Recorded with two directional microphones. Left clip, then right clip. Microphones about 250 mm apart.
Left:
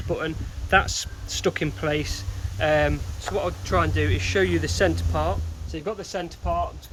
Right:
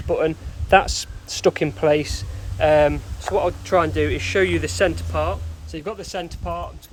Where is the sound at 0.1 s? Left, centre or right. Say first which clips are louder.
Right 7 dB; right.